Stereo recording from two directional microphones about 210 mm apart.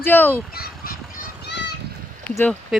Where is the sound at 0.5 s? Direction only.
45° left (ahead or behind).